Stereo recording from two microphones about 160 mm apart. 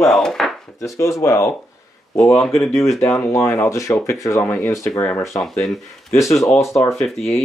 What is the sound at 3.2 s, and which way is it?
Speech, 20° left (ahead or behind).